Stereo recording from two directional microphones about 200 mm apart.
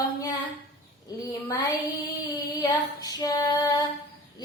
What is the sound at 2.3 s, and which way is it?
A woman's voice, 20° left (ahead or behind).